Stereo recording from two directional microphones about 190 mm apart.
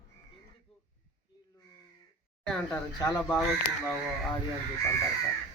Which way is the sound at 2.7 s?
15° left (ahead or behind).